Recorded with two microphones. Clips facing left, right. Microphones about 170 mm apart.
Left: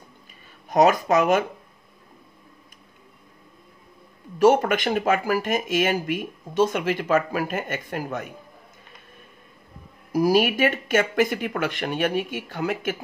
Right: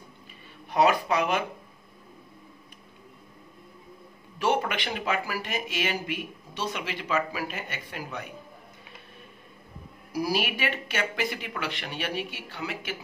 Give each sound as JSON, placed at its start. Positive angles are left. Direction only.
{"t": 0.7, "sound": "speech", "side_deg": 45}
{"t": 4.4, "sound": "speech", "side_deg": 45}
{"t": 10.1, "sound": "speech", "side_deg": 45}